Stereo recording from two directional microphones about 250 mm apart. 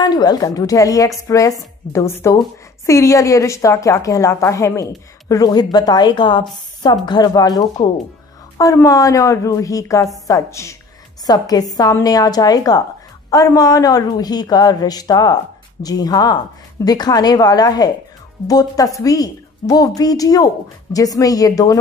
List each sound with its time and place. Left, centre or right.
0.0 s a woman's voice: centre